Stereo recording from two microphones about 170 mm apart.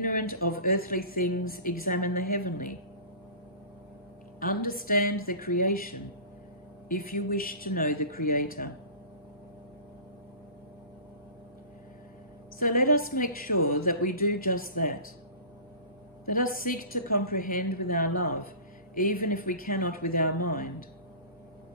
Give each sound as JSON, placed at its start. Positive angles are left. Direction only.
{"t": 0.0, "sound": "speech", "side_deg": 55}
{"t": 4.4, "sound": "speech", "side_deg": 60}
{"t": 12.5, "sound": "speech", "side_deg": 55}
{"t": 16.3, "sound": "speech", "side_deg": 55}